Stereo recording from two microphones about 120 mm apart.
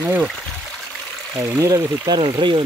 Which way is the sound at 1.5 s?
30° right (ahead or behind).